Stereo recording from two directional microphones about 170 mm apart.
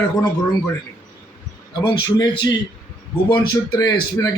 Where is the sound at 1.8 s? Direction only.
30° left (ahead or behind).